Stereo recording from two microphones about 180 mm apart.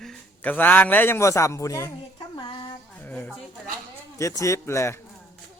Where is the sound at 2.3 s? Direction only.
25° left (ahead or behind).